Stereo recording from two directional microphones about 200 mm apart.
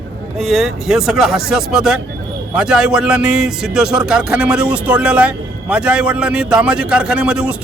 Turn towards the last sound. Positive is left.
turn(degrees=-5)  # may be behind; listen again after turning